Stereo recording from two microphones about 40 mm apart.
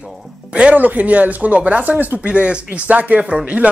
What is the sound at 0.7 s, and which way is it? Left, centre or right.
Speech, right.